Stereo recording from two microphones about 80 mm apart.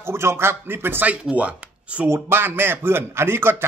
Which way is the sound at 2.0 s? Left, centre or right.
Right.